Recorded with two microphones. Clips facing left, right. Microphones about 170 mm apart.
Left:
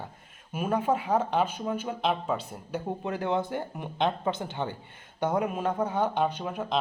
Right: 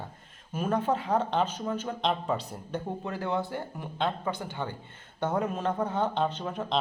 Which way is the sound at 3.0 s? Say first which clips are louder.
Left 4 dB; 20° left (ahead or behind).